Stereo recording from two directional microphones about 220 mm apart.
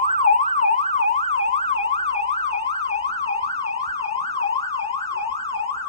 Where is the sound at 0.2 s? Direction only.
30° left (ahead or behind).